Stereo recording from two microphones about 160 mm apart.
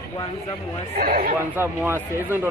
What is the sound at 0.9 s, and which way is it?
Speech, 70° right (ahead or behind).